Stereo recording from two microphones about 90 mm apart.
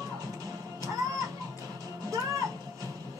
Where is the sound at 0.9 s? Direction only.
40° right (ahead or behind).